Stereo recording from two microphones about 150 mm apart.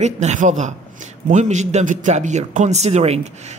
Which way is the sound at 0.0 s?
50° right (ahead or behind).